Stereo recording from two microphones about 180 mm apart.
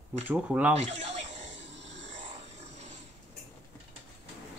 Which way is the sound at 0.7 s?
35° right (ahead or behind).